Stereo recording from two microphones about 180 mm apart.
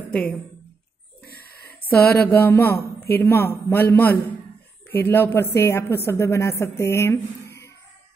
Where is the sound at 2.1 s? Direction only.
10° left (ahead or behind).